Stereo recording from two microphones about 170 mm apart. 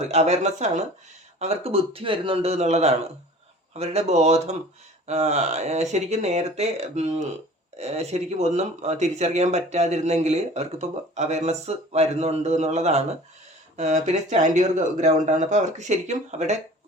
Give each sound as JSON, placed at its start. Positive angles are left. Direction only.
{"t": 0.1, "sound": "speech", "side_deg": -40}